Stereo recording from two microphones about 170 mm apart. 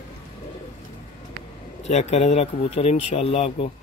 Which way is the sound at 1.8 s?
40° left (ahead or behind).